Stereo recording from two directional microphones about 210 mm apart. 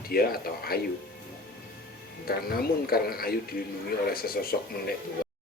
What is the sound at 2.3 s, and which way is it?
Speech, 45° left (ahead or behind).